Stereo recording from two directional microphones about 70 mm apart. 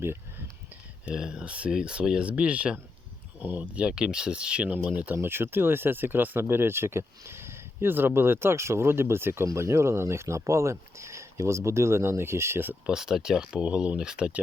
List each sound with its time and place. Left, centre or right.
0.0 s a sound: right
1.0 s speech: centre
5.1 s speech: right
12.8 s speech: centre